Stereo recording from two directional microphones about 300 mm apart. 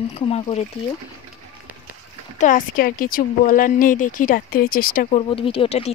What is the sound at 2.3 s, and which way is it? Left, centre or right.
Speech, left.